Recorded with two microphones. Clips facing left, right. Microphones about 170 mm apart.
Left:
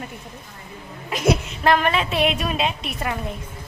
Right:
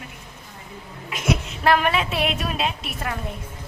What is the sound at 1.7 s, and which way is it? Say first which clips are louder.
A woman's voice: left 1 dB; 5° right (ahead or behind).